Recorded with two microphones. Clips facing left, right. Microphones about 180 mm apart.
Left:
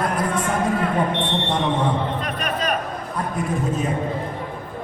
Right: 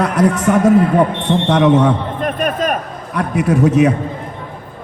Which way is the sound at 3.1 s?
75° right (ahead or behind).